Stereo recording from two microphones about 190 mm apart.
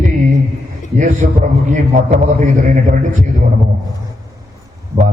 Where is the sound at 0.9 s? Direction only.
40° right (ahead or behind).